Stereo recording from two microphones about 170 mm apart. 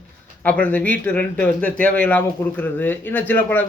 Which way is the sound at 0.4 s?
10° left (ahead or behind).